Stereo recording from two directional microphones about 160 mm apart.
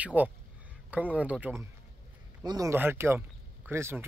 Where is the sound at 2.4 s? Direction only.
20° right (ahead or behind).